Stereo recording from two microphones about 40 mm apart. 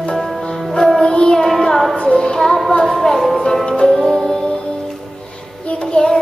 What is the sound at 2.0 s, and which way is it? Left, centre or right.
Child singing, left.